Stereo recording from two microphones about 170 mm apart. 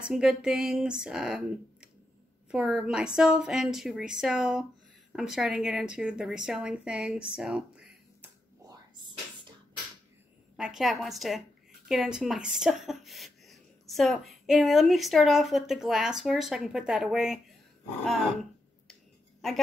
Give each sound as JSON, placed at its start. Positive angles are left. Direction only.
{"t": 0.0, "sound": "a woman's voice", "side_deg": -5}
{"t": 8.6, "sound": "a sound", "side_deg": -25}
{"t": 10.5, "sound": "a woman's voice", "side_deg": -5}